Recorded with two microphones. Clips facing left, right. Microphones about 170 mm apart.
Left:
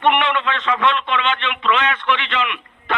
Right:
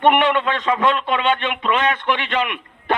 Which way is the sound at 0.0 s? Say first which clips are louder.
Right 2 dB; 40° right (ahead or behind).